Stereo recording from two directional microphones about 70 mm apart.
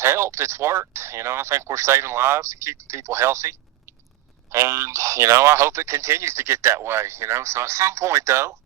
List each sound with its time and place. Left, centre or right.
0.0 s speech: right